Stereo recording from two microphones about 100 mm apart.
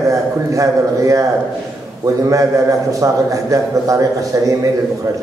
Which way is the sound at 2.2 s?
35° right (ahead or behind).